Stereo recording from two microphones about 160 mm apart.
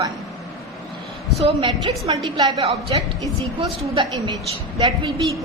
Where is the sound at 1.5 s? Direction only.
35° right (ahead or behind).